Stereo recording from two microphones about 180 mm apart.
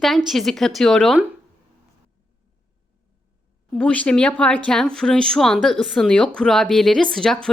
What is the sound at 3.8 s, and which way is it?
A woman's voice, 5° left (ahead or behind).